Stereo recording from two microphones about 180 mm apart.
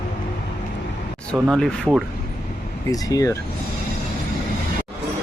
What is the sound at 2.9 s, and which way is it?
Speech, 20° left (ahead or behind).